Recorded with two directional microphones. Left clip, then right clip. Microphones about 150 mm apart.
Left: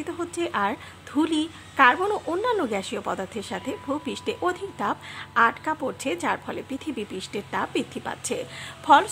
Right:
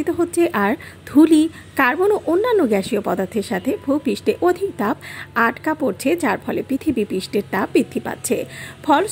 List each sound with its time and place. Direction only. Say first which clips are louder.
0.0 s speech: right 11 dB; 25° right (ahead or behind)